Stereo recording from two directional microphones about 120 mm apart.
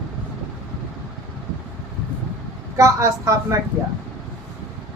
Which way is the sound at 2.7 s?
25° right (ahead or behind).